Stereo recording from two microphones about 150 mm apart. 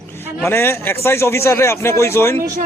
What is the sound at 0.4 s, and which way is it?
Speech, 15° left (ahead or behind).